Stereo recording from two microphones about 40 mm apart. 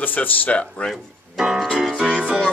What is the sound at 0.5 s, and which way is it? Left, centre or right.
Speech, left.